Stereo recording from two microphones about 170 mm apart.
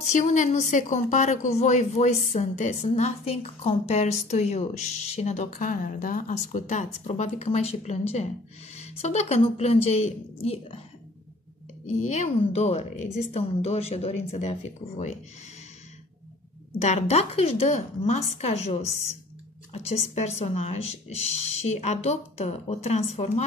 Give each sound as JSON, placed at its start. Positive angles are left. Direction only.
{"t": 0.0, "sound": "a woman's voice", "side_deg": 45}
{"t": 11.8, "sound": "a woman's voice", "side_deg": 45}
{"t": 16.7, "sound": "a woman's voice", "side_deg": 40}